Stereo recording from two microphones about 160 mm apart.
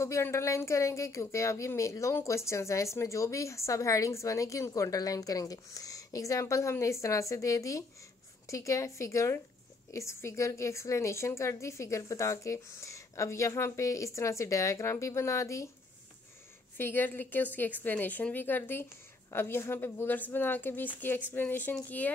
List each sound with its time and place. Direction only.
0.0 s speech: 15° left (ahead or behind)
16.7 s speech: 15° left (ahead or behind)